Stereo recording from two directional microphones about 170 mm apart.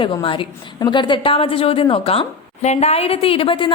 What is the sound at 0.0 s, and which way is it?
A woman's voice, 30° left (ahead or behind).